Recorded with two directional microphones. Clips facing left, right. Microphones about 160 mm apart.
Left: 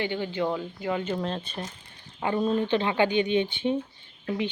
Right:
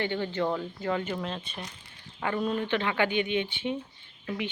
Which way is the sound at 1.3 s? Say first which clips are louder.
Left 4 dB; 35° left (ahead or behind).